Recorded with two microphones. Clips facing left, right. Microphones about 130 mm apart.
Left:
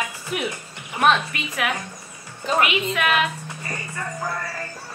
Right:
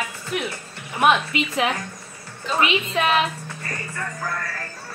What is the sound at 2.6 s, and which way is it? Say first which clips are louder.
Speech: right 2 dB; 30° right (ahead or behind).